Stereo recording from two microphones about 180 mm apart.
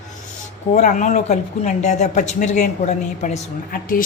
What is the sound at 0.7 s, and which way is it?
A woman's voice, 45° left (ahead or behind).